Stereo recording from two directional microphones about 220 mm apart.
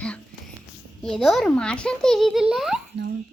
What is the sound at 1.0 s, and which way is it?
A child's voice, centre (ahead or behind).